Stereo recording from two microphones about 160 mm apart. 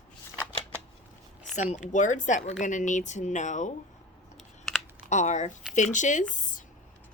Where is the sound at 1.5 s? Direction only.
45° left (ahead or behind).